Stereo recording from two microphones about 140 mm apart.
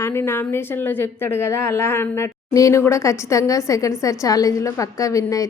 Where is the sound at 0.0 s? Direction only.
20° left (ahead or behind).